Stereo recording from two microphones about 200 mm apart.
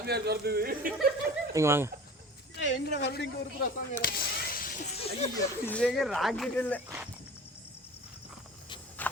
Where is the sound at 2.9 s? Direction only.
60° left (ahead or behind).